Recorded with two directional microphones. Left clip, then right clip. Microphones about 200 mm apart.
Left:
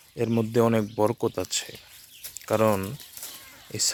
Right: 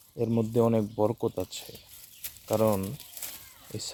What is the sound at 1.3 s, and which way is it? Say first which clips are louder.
Speech: left 5 dB; centre (ahead or behind).